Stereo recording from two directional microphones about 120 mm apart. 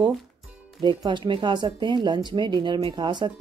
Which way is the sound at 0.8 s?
40° right (ahead or behind).